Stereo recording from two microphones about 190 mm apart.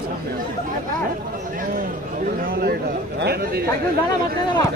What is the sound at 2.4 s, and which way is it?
A man's voice, 55° right (ahead or behind).